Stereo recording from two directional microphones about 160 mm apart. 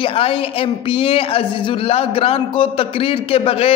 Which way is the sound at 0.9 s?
35° left (ahead or behind).